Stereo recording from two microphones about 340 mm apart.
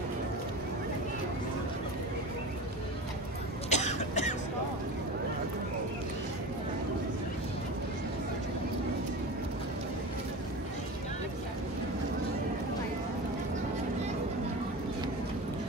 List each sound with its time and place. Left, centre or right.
3.7 s cough: centre